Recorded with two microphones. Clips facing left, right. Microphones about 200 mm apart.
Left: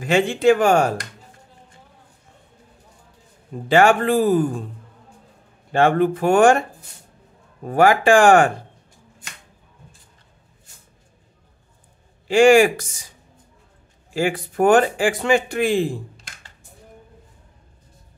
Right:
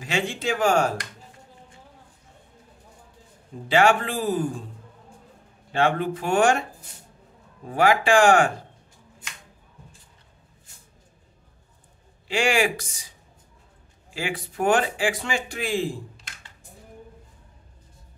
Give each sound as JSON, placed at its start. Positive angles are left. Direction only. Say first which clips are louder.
{"t": 0.0, "sound": "speech", "louder": "left 10 dB", "side_deg": 55}
{"t": 3.6, "sound": "speech", "louder": "left 5 dB", "side_deg": 50}
{"t": 5.7, "sound": "speech", "louder": "left 6 dB", "side_deg": 50}
{"t": 7.6, "sound": "speech", "louder": "left 5 dB", "side_deg": 50}
{"t": 12.3, "sound": "speech", "louder": "left 10 dB", "side_deg": 50}
{"t": 14.1, "sound": "speech", "louder": "left 8 dB", "side_deg": 50}